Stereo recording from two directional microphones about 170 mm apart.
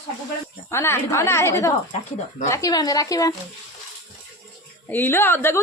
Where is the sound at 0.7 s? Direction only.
15° left (ahead or behind).